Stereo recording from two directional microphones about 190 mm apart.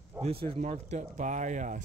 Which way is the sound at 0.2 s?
30° right (ahead or behind).